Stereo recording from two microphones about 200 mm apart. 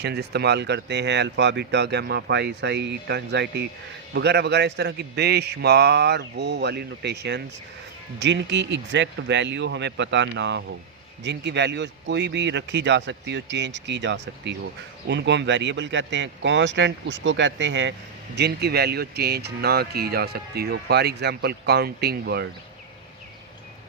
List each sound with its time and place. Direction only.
0.0 s speech: 55° right (ahead or behind)